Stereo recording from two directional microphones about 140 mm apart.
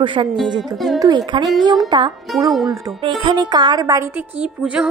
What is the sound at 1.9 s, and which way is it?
A woman's voice, 35° right (ahead or behind).